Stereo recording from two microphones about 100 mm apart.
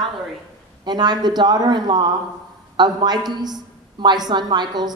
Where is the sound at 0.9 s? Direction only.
45° right (ahead or behind).